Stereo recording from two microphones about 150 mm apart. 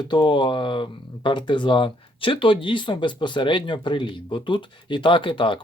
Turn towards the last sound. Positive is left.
turn(degrees=35)  # may be behind; listen again after turning